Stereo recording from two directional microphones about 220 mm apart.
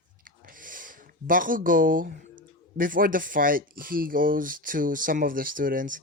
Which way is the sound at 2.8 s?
40° right (ahead or behind).